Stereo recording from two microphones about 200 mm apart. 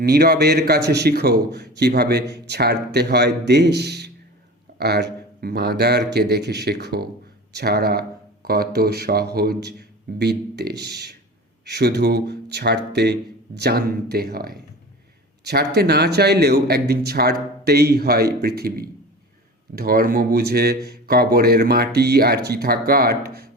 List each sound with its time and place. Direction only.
0.0 s a man's voice: 50° right (ahead or behind)